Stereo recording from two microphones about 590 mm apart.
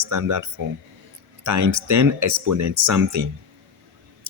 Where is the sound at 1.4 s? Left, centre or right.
Right.